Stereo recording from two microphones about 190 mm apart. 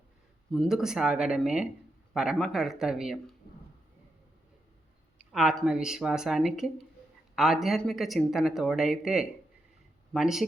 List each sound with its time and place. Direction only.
0.5 s speech: centre (ahead or behind)
5.1 s speech: 5° right (ahead or behind)